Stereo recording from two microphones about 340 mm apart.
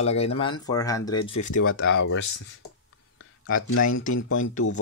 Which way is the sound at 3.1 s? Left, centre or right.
Left.